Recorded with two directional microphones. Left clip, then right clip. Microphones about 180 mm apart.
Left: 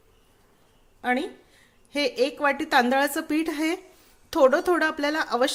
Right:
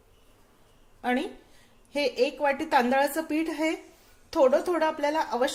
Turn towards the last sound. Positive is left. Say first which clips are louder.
# left 2 dB
turn(degrees=35)  # may be behind; listen again after turning